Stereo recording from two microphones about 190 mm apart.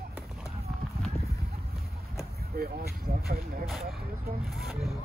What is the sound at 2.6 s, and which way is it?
Speech, 55° right (ahead or behind).